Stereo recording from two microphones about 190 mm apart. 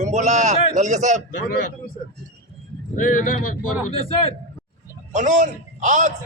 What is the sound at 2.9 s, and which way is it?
Speech, 45° left (ahead or behind).